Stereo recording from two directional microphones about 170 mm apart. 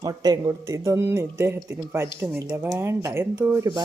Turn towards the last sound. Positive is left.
turn(degrees=-15)  # may be behind; listen again after turning